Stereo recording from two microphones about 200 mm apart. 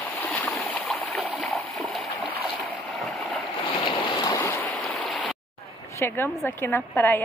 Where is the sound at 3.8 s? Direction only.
15° left (ahead or behind).